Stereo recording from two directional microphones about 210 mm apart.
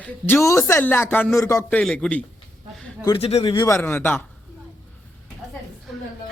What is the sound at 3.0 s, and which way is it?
A man's voice, 25° left (ahead or behind).